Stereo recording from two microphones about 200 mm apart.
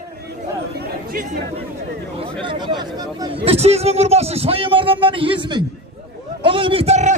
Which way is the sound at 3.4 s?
30° right (ahead or behind).